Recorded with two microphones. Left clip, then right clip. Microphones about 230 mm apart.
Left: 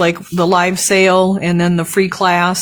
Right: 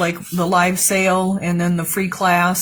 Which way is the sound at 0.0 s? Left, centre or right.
Left.